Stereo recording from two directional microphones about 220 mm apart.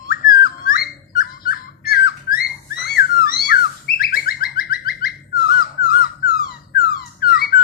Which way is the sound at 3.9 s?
45° left (ahead or behind).